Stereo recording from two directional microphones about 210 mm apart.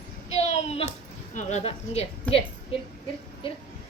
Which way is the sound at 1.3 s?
30° left (ahead or behind).